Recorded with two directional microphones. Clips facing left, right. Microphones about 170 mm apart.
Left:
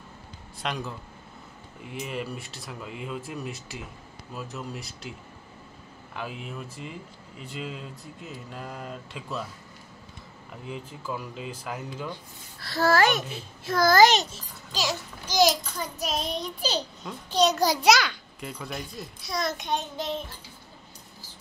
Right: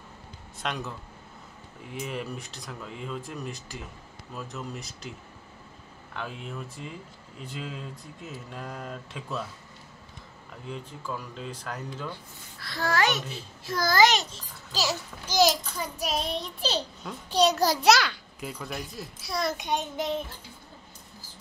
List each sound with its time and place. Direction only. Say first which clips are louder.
0.6 s a child's voice: left 1 dB; centre (ahead or behind)
6.1 s a child's voice: left 1 dB; 5° left (ahead or behind)
10.7 s speech: left 1 dB; 5° left (ahead or behind)
12.5 s a child's voice: left 5 dB; 35° left (ahead or behind)
13.7 s a child's voice: left 5 dB; 55° left (ahead or behind)
14.7 s a child's voice: even; 5° right (ahead or behind)